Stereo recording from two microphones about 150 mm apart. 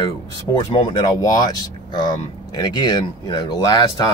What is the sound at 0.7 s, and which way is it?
Speech, 35° left (ahead or behind).